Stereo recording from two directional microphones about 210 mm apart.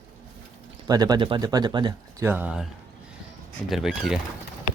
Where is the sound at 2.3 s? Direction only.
10° right (ahead or behind).